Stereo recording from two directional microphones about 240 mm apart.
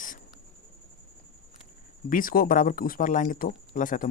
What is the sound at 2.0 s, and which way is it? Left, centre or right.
Speech, left.